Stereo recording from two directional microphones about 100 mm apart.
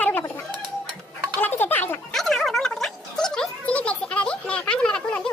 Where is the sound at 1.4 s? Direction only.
20° left (ahead or behind).